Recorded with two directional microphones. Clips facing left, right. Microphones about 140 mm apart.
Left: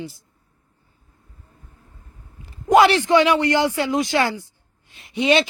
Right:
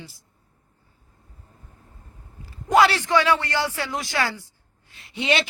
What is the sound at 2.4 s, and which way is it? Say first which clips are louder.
A man's voice: left 4 dB; 20° left (ahead or behind).